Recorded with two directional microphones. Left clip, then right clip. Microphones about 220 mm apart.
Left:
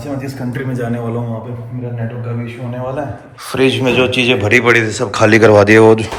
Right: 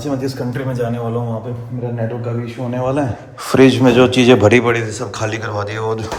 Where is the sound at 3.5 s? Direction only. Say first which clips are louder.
Right 2 dB; 25° right (ahead or behind).